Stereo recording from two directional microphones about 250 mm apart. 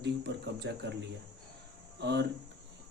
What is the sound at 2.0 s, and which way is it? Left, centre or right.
Speech, right.